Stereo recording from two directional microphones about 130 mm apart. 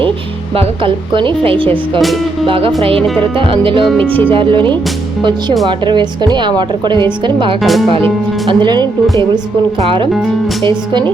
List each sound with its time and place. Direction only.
0.5 s a woman's voice: 45° right (ahead or behind)
3.8 s speech: 10° left (ahead or behind)
4.3 s a woman's voice: 40° right (ahead or behind)
7.6 s speech: centre (ahead or behind)
8.4 s a woman's voice: 35° right (ahead or behind)